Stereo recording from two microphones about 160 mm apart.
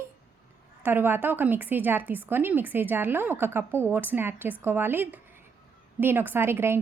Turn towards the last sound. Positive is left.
turn(degrees=-15)  # may be behind; listen again after turning